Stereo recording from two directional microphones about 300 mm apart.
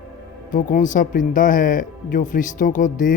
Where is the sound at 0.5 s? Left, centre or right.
Left.